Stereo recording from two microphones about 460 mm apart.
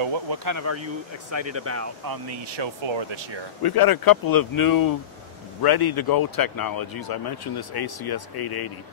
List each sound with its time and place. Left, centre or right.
0.3 s speech: right
2.0 s speech: right
3.6 s a man's voice: left